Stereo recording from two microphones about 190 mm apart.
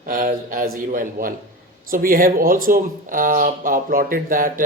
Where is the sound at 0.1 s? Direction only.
45° right (ahead or behind).